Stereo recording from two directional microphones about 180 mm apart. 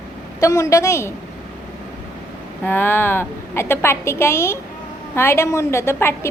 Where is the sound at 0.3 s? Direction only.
20° left (ahead or behind).